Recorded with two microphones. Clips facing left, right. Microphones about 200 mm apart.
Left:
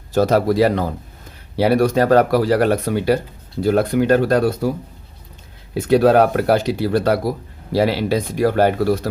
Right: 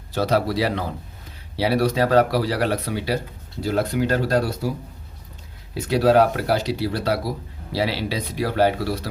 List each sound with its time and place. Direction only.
0.1 s speech: 45° left (ahead or behind)
5.7 s speech: 50° left (ahead or behind)